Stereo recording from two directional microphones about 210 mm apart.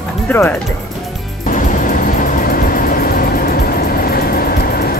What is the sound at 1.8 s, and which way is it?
Vehicle, 40° left (ahead or behind).